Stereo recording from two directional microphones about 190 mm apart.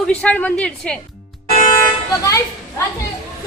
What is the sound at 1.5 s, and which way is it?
Toot, 40° left (ahead or behind).